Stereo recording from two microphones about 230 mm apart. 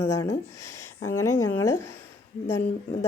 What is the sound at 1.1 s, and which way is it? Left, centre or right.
Speech, left.